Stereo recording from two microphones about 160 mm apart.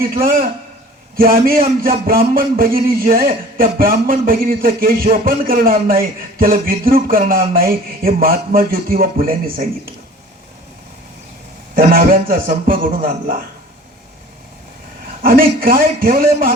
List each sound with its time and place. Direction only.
0.0 s a man's voice: 65° right (ahead or behind)
11.7 s a man's voice: 60° right (ahead or behind)
15.2 s a man's voice: 65° right (ahead or behind)